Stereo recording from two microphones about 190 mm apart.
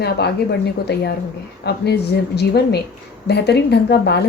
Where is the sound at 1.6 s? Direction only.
60° left (ahead or behind).